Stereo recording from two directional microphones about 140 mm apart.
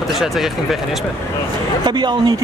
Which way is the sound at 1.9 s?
30° right (ahead or behind).